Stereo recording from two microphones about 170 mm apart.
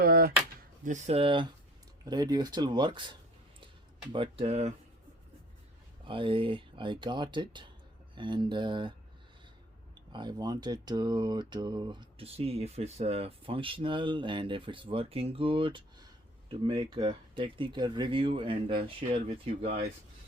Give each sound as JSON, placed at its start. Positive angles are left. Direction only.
{"t": 0.0, "sound": "drawer open or close", "side_deg": -65}
{"t": 0.9, "sound": "speech", "side_deg": -45}
{"t": 6.1, "sound": "speech", "side_deg": -30}
{"t": 10.1, "sound": "speech", "side_deg": -25}